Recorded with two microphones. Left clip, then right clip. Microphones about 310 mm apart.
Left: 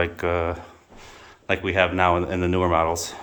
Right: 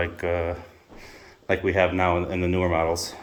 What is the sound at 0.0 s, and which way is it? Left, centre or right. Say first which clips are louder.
Speech: left 2 dB; centre.